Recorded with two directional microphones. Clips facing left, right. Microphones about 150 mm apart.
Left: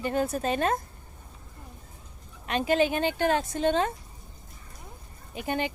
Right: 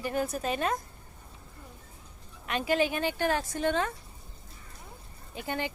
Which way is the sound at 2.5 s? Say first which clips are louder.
Left 3 dB; 25° left (ahead or behind).